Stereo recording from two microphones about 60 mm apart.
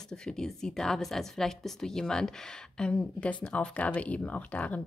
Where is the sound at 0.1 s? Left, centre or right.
Centre.